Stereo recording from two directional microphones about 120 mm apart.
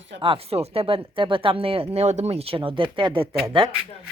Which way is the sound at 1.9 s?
65° right (ahead or behind).